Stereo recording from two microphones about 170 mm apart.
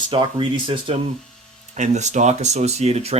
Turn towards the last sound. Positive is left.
turn(degrees=-35)  # may be behind; listen again after turning